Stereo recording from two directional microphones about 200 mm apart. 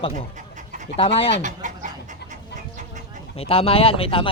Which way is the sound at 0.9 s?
30° left (ahead or behind).